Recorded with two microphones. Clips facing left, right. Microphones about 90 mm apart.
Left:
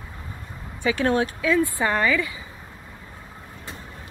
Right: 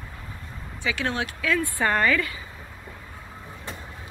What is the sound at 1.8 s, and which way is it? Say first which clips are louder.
Speech: even; 10° left (ahead or behind).